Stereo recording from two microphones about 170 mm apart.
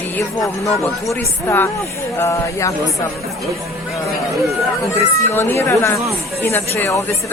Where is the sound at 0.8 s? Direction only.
15° left (ahead or behind).